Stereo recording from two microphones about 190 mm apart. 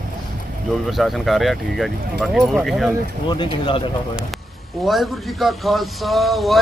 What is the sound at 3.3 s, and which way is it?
Speech, 25° left (ahead or behind).